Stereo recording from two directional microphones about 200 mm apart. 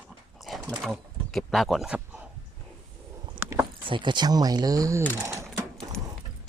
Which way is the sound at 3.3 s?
15° right (ahead or behind).